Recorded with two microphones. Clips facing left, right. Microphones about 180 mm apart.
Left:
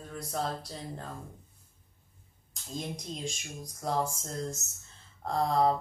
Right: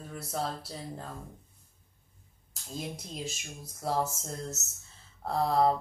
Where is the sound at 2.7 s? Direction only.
5° right (ahead or behind).